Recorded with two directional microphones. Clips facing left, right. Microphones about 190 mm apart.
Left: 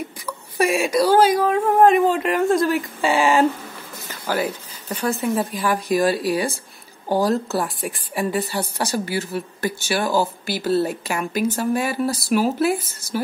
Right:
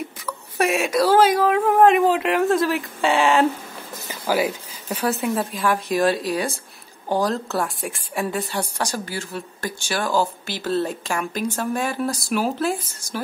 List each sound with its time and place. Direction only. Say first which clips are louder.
0.3 s speech: left 1 dB; centre (ahead or behind)
4.1 s a woman's voice: right 2 dB; 10° right (ahead or behind); by 13.2 s 10° left (ahead or behind)